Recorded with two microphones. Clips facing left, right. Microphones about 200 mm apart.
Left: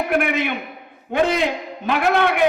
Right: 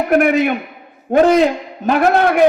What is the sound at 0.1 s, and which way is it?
A man's voice, 40° right (ahead or behind).